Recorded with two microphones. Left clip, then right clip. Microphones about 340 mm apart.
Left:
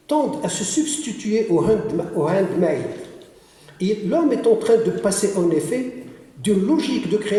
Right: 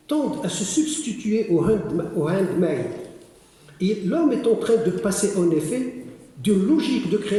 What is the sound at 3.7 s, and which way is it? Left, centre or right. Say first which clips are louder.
A man's voice: left 3 dB; left.